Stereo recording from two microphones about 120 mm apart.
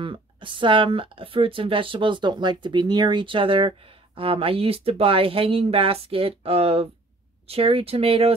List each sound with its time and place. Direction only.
0.0 s speech: 45° right (ahead or behind)